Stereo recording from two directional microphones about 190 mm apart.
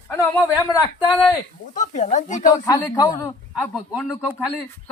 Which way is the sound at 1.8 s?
40° left (ahead or behind).